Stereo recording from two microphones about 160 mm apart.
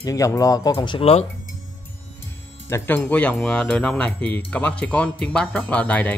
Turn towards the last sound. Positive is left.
turn(degrees=10)  # may be behind; listen again after turning